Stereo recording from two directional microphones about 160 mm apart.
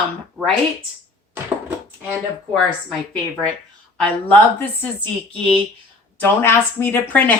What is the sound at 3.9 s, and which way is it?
Speech, 10° left (ahead or behind).